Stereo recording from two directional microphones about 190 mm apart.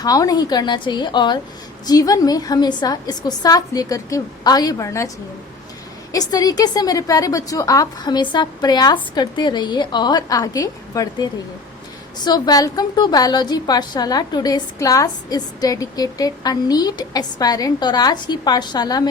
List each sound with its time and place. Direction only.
0.0 s a woman's voice: 20° left (ahead or behind)